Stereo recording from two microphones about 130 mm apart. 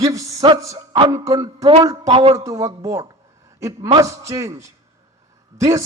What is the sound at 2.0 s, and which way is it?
Speech, 50° right (ahead or behind).